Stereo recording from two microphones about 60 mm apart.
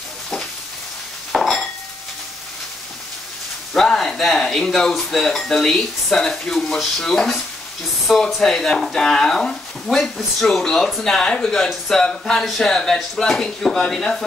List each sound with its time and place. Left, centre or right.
1.3 s dishes: centre
3.7 s speech: centre